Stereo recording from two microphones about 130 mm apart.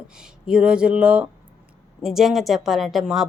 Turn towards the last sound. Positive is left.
turn(degrees=0)  # may be behind; listen again after turning